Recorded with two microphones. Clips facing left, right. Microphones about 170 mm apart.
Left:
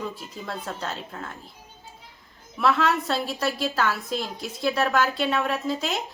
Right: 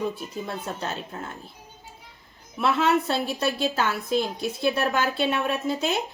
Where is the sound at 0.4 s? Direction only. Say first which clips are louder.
Left 1 dB; 20° right (ahead or behind).